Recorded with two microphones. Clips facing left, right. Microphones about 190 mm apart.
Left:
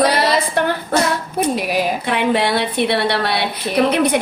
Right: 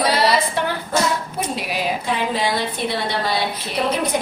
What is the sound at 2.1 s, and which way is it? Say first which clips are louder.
A woman's voice: left 6 dB; 65° left (ahead or behind).